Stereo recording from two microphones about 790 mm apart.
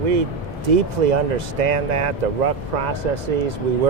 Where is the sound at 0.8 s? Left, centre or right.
Right.